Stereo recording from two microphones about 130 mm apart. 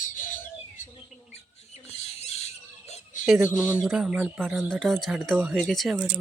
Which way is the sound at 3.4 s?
15° right (ahead or behind).